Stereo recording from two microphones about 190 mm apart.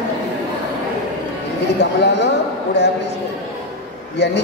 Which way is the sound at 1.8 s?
65° left (ahead or behind).